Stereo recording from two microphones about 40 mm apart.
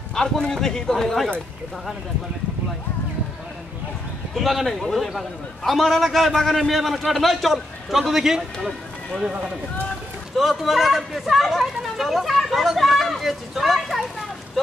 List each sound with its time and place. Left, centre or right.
0.1 s speech: centre
4.4 s speech: centre
8.1 s a man's voice: centre
10.3 s speech: centre
12.4 s a sound: centre